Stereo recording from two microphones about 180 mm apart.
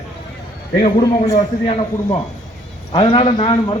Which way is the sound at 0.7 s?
25° left (ahead or behind).